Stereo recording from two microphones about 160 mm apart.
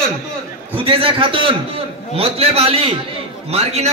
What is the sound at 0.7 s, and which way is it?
A man's voice, 35° right (ahead or behind).